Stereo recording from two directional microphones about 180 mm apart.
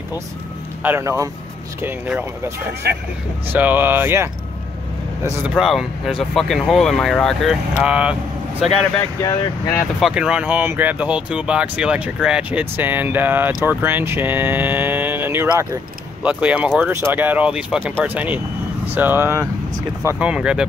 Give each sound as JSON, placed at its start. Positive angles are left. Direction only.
{"t": 0.8, "sound": "speech", "side_deg": -15}
{"t": 3.5, "sound": "speech", "side_deg": -10}
{"t": 5.5, "sound": "speech", "side_deg": 0}
{"t": 9.2, "sound": "speech", "side_deg": 20}
{"t": 9.9, "sound": "speech", "side_deg": -5}